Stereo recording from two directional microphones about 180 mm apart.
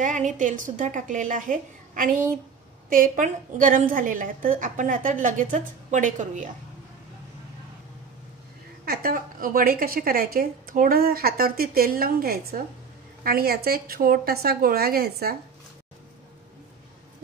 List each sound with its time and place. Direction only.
0.0 s a woman's voice: 45° right (ahead or behind)
8.8 s a woman's voice: 60° right (ahead or behind)